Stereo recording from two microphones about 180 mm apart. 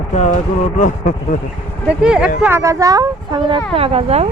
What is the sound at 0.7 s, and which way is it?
Speech, 45° left (ahead or behind).